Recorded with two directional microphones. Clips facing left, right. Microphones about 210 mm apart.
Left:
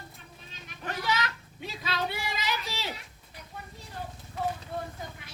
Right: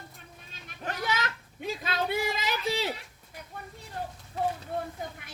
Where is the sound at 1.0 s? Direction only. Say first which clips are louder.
Left 1 dB; 50° right (ahead or behind).